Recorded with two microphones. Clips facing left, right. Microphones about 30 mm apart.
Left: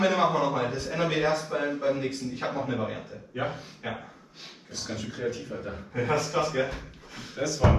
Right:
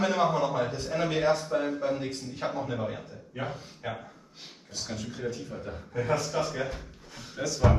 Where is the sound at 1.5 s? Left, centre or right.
Left.